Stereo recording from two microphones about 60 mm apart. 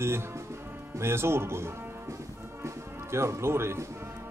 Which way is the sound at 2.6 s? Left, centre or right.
Right.